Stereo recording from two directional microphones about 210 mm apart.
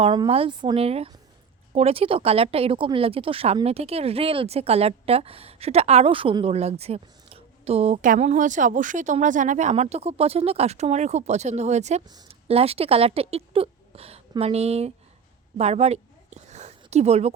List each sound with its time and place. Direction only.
0.0 s speech: 25° right (ahead or behind)
12.0 s speech: 20° right (ahead or behind)
15.5 s a sound: 30° right (ahead or behind)